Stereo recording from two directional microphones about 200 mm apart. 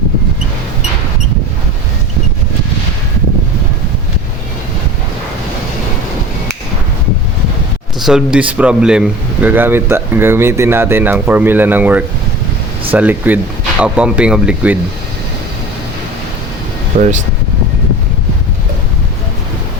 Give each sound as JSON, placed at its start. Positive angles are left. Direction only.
{"t": 7.9, "sound": "speech", "side_deg": 0}
{"t": 16.9, "sound": "speech", "side_deg": -35}